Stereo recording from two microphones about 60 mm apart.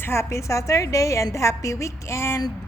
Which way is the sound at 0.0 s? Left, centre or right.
Left.